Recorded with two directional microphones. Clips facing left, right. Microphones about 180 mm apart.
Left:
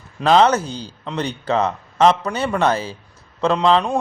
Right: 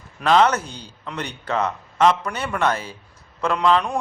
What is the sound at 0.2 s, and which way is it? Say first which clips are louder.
A man's voice: left 3 dB; 30° left (ahead or behind).